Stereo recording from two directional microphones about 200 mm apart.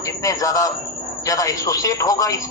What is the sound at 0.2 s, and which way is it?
A man's voice, 15° left (ahead or behind).